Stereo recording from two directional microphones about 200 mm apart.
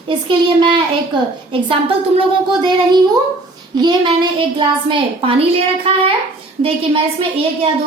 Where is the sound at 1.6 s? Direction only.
25° right (ahead or behind).